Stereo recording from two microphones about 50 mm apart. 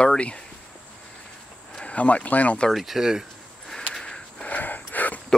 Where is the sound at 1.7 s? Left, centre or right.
Left.